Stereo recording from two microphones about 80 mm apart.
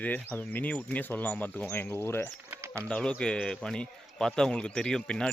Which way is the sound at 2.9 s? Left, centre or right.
Centre.